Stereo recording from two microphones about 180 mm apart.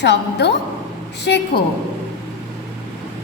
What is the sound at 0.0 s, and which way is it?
A woman's voice, 70° left (ahead or behind).